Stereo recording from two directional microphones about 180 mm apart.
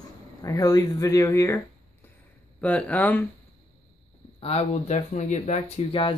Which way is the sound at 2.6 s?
5° left (ahead or behind).